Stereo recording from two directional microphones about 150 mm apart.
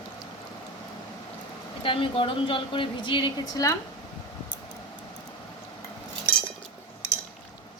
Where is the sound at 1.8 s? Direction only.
35° left (ahead or behind).